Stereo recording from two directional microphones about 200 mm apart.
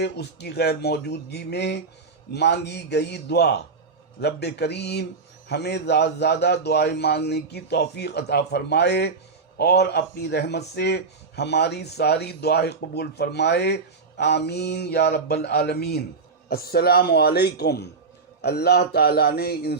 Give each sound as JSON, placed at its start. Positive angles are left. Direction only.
{"t": 0.0, "sound": "a man's voice", "side_deg": 55}